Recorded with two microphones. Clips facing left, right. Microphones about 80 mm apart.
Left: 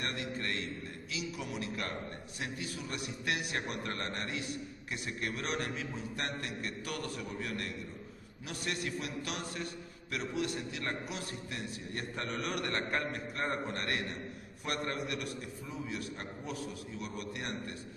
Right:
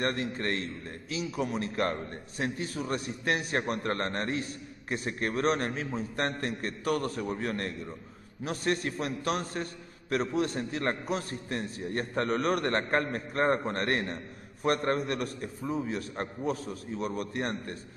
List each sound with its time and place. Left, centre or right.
0.0 s a man's voice: right